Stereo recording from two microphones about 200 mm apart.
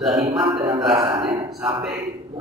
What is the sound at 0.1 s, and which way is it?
Music, 20° right (ahead or behind).